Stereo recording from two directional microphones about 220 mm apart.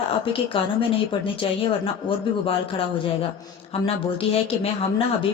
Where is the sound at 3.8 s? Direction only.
25° left (ahead or behind).